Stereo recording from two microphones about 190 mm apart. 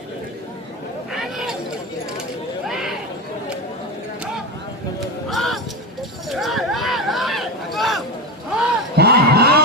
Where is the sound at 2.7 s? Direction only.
Centre (ahead or behind).